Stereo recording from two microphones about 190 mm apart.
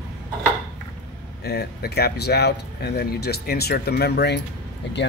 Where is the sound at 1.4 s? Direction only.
60° left (ahead or behind).